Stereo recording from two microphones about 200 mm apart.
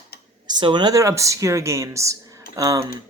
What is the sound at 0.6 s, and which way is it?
Speech, 20° right (ahead or behind).